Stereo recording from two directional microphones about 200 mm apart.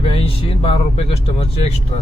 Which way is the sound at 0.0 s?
30° left (ahead or behind).